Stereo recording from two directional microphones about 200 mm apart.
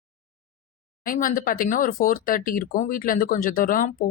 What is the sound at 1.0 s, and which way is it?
Speech, 45° left (ahead or behind).